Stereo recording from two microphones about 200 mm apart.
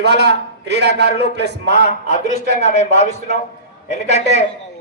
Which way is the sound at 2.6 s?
35° left (ahead or behind).